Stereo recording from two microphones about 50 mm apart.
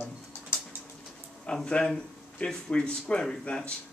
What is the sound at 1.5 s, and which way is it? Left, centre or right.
Speech, left.